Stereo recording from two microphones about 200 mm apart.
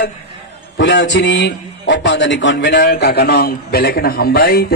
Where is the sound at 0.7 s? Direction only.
65° left (ahead or behind).